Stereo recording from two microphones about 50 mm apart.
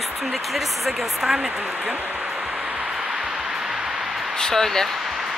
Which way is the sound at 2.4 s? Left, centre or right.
Centre.